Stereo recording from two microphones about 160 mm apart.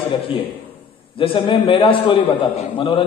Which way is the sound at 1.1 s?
35° left (ahead or behind).